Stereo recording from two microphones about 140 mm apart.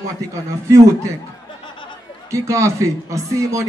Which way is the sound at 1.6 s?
35° left (ahead or behind).